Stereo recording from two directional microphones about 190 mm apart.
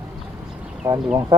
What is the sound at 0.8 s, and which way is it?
Speech, 15° right (ahead or behind).